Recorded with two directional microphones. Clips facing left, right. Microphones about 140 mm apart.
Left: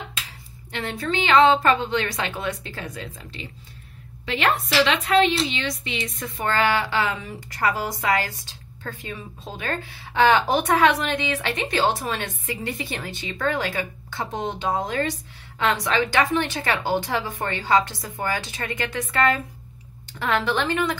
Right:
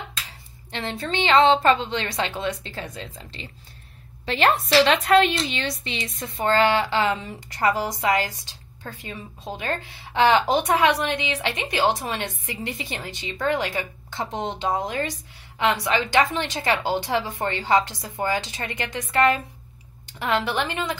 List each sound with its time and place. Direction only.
0.7 s a woman's voice: 25° right (ahead or behind); by 5.3 s 45° right (ahead or behind)
5.6 s a woman's voice: 35° right (ahead or behind)
9.6 s a woman's voice: 20° right (ahead or behind)